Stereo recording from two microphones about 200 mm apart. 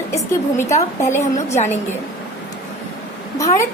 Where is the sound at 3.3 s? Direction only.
15° left (ahead or behind).